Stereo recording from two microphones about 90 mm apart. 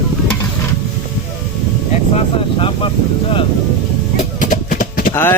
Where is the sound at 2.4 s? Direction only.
90° left.